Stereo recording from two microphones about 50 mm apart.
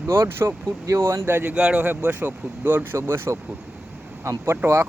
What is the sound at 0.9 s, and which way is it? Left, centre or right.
Speech, right.